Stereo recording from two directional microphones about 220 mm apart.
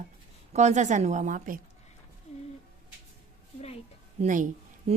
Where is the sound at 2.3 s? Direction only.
30° left (ahead or behind).